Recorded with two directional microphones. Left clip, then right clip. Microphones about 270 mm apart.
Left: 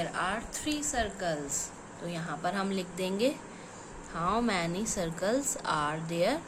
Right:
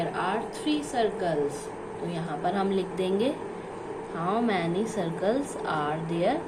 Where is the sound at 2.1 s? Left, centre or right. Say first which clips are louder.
Right 4 dB; left.